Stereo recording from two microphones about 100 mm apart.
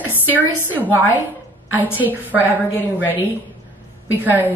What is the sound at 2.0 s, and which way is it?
Speech, 15° right (ahead or behind).